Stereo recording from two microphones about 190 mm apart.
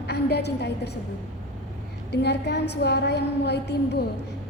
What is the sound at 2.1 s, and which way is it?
A woman's voice, 65° left (ahead or behind).